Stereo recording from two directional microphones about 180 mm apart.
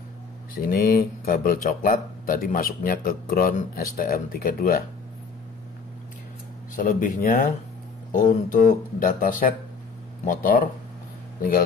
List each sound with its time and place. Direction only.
0.6 s speech: 55° left (ahead or behind)
6.7 s speech: 45° left (ahead or behind)